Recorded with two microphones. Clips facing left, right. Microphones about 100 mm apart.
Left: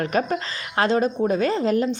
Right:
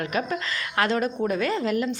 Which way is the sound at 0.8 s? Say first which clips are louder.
Left 4 dB; 25° left (ahead or behind).